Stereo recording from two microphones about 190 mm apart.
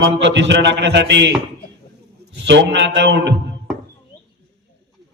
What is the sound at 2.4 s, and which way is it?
Speech, 70° right (ahead or behind).